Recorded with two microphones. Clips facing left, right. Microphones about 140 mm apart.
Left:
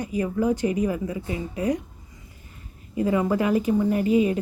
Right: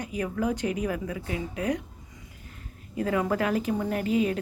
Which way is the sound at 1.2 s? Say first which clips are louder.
Left 2 dB; 65° right (ahead or behind).